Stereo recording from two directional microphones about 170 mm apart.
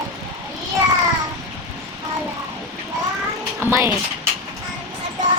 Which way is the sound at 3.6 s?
15° right (ahead or behind).